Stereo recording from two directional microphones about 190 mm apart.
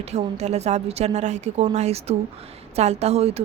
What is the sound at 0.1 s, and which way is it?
A woman's voice, 35° right (ahead or behind).